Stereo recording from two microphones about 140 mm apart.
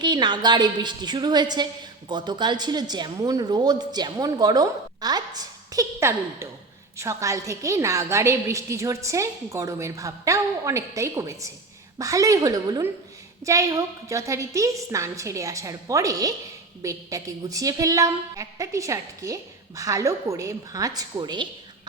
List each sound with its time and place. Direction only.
0.0 s a woman's voice: 30° right (ahead or behind)